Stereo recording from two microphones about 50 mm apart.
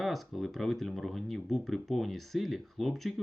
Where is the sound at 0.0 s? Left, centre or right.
Centre.